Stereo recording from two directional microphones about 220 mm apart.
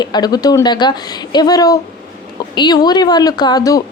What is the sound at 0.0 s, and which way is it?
A woman's voice, 20° left (ahead or behind).